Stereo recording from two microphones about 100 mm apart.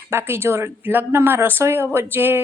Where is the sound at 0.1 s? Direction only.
25° right (ahead or behind).